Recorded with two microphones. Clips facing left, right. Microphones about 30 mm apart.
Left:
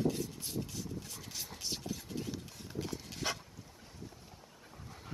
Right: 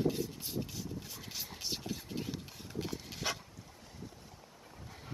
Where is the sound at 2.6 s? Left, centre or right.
Centre.